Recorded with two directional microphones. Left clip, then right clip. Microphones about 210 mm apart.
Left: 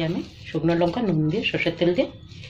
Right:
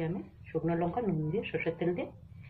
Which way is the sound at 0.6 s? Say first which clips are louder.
Left 11 dB; 55° left (ahead or behind).